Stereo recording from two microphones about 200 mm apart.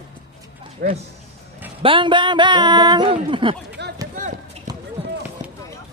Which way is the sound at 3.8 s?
55° right (ahead or behind).